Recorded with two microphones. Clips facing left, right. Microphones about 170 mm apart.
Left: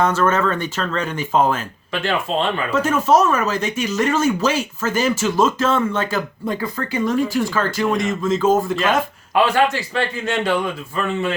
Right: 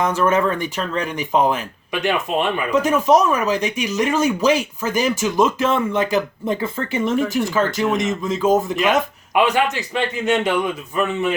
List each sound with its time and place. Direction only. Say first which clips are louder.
0.0 s speech: even; 15° right (ahead or behind)